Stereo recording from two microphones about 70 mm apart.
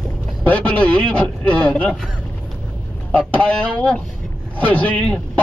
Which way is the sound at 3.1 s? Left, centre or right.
Centre.